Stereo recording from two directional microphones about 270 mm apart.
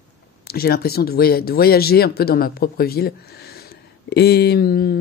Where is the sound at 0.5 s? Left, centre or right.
Left.